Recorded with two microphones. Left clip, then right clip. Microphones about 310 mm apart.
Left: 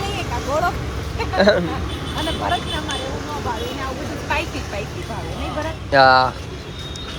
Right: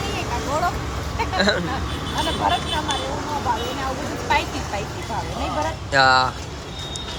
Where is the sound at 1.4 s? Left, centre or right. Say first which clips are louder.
Left 6 dB; centre.